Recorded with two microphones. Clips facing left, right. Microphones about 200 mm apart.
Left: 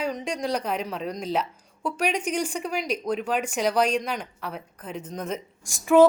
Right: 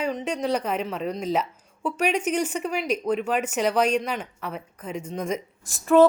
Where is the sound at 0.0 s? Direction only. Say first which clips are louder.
Right 2 dB; centre (ahead or behind).